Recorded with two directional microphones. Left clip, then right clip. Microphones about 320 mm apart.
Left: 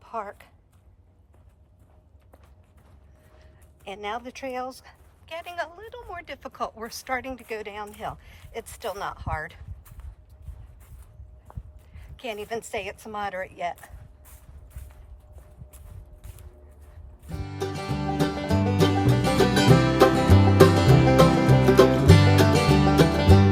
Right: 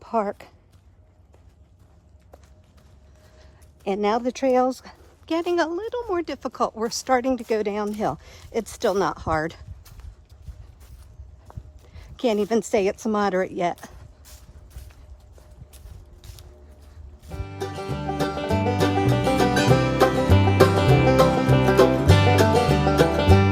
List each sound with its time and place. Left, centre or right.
0.0 s a woman's voice: centre
3.8 s speech: centre
12.1 s speech: centre
14.3 s walk: centre
17.2 s music: centre